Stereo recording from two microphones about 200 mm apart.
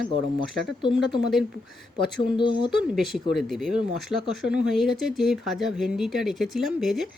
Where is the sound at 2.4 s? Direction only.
25° left (ahead or behind).